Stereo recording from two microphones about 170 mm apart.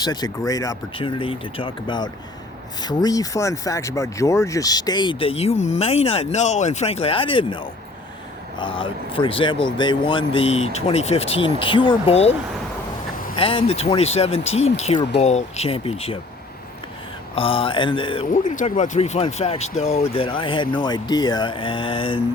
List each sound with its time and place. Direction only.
0.0 s speech: 25° left (ahead or behind)
0.9 s speech: 30° left (ahead or behind)
13.3 s speech: 30° left (ahead or behind)
17.3 s speech: 30° left (ahead or behind)
18.4 s speech: 45° left (ahead or behind); by 22.2 s 30° left (ahead or behind)